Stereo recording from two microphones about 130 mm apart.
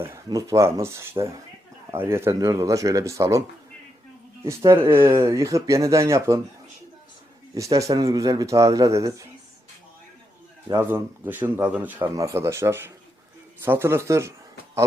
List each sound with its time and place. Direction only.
0.3 s speech: 25° right (ahead or behind)
4.4 s speech: 20° right (ahead or behind)
7.5 s speech: 25° right (ahead or behind)
10.7 s speech: 20° right (ahead or behind)